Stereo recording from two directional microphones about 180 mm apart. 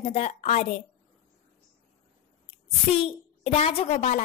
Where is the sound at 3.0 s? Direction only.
35° left (ahead or behind).